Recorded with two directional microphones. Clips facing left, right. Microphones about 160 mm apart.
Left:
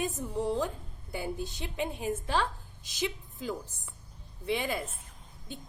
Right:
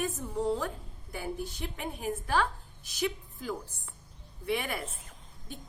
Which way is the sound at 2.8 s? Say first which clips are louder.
Right 2 dB; 20° left (ahead or behind).